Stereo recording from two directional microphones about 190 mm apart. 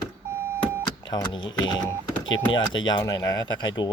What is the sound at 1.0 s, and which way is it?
Speech, 25° left (ahead or behind).